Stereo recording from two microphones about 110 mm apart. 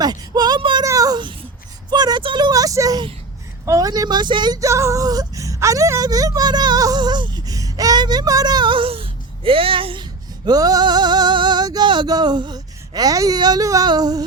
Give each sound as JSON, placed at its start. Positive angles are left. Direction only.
{"t": 0.0, "sound": "speech", "side_deg": -40}
{"t": 0.9, "sound": "a sound", "side_deg": -35}
{"t": 1.9, "sound": "speech", "side_deg": -40}